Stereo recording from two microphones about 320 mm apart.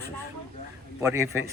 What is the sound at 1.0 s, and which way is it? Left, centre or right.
Speech, centre.